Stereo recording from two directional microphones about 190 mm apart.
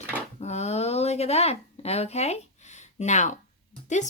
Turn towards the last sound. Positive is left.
turn(degrees=40)  # may be behind; listen again after turning